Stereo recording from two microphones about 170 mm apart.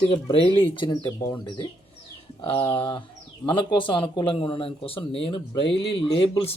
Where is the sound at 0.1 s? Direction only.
30° left (ahead or behind).